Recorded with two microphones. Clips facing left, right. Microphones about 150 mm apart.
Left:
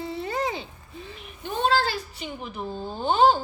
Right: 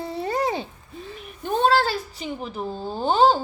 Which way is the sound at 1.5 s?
40° right (ahead or behind).